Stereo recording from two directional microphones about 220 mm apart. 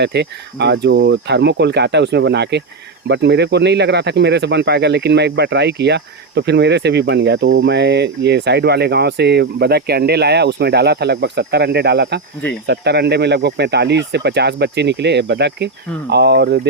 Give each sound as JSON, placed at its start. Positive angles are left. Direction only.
{"t": 0.0, "sound": "speech", "side_deg": -50}